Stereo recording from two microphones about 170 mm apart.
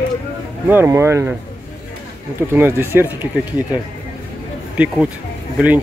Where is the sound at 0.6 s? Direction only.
15° right (ahead or behind).